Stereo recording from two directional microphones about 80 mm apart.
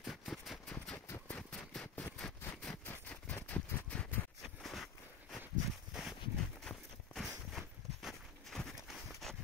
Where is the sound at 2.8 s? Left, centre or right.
Left.